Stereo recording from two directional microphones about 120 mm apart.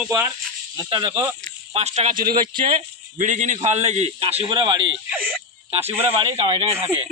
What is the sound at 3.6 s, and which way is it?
Speech, 70° right (ahead or behind).